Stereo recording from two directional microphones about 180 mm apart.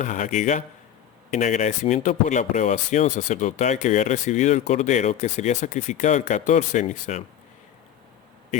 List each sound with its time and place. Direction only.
0.0 s speech: 40° left (ahead or behind)